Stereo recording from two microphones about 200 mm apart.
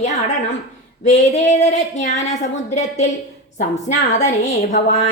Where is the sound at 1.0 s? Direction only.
35° left (ahead or behind).